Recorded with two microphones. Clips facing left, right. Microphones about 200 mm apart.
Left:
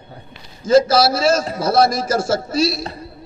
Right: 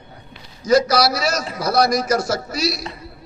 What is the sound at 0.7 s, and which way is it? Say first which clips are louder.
A man's voice: left 3 dB; 25° left (ahead or behind).